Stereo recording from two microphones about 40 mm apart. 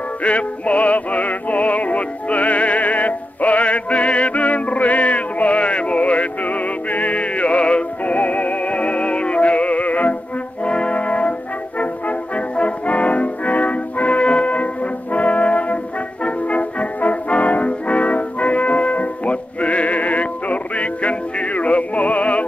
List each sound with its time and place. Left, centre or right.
0.2 s music: left
10.6 s brass instrument: left